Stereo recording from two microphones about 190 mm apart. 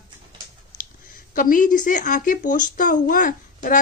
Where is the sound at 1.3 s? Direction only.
45° left (ahead or behind).